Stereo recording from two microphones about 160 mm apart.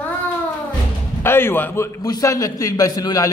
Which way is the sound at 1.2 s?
15° left (ahead or behind).